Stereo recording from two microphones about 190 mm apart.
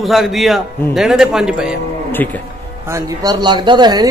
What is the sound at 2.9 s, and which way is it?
Speech, 20° right (ahead or behind).